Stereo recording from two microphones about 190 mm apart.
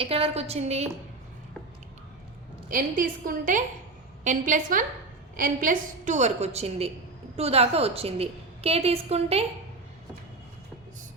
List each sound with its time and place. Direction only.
0.0 s a woman's voice: 30° right (ahead or behind)
2.6 s a woman's voice: 45° right (ahead or behind)